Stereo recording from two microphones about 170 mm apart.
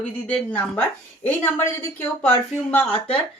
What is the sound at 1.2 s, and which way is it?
Speech, 10° left (ahead or behind).